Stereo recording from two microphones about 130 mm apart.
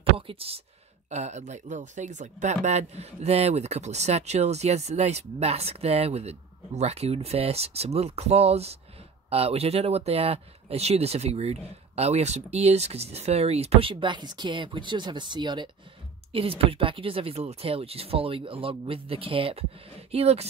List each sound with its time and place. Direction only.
0.3 s speech: 45° right (ahead or behind)
1.1 s speech: 60° right (ahead or behind); by 15.7 s 35° right (ahead or behind)
16.3 s speech: 45° right (ahead or behind)